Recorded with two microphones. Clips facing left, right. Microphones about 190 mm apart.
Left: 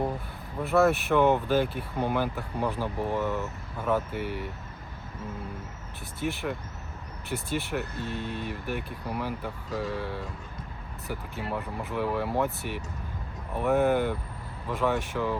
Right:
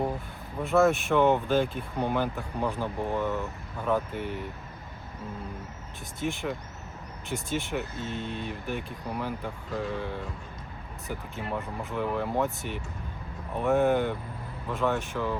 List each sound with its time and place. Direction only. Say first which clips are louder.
0.7 s speech: even; 5° left (ahead or behind)
6.1 s speech: even; 5° left (ahead or behind)
8.3 s speech: left 1 dB; 60° left (ahead or behind)
8.6 s speech: even; 5° left (ahead or behind)